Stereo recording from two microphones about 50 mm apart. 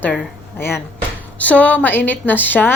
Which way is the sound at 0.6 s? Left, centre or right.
Left.